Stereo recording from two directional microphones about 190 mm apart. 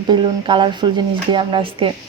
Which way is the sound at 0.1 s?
25° right (ahead or behind).